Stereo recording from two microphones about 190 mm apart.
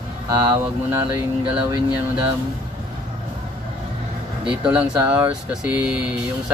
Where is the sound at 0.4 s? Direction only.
20° right (ahead or behind).